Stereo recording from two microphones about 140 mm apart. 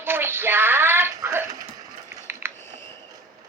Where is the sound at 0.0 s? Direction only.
15° right (ahead or behind).